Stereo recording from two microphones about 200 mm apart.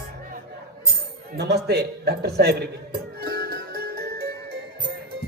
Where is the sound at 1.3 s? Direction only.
55° right (ahead or behind).